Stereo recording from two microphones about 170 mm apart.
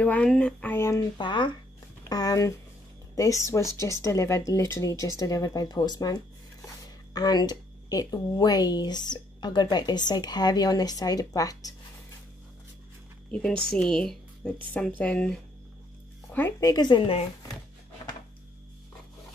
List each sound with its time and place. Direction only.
0.0 s speech: 5° left (ahead or behind)
13.3 s a woman's voice: 5° left (ahead or behind)
16.3 s speech: 15° left (ahead or behind); by 17.3 s 30° left (ahead or behind)